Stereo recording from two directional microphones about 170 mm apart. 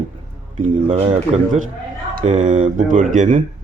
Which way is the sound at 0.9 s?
35° right (ahead or behind).